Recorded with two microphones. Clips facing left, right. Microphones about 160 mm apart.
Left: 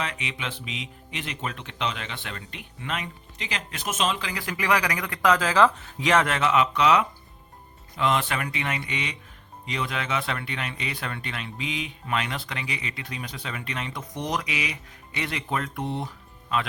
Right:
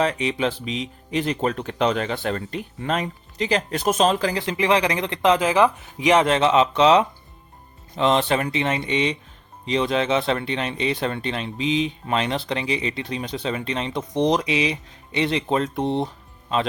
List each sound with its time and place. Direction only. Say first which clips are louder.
0.0 s speech: right 11 dB; 35° right (ahead or behind)
4.4 s speech: right 5 dB; 25° right (ahead or behind)